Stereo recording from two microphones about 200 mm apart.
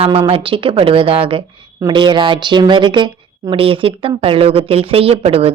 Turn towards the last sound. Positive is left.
turn(degrees=-30)  # may be behind; listen again after turning